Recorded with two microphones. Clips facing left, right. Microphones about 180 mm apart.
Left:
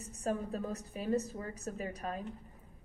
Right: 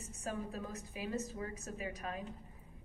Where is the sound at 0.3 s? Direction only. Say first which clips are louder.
Left 6 dB; 35° left (ahead or behind).